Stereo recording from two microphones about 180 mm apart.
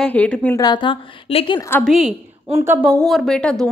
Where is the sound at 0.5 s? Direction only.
25° left (ahead or behind).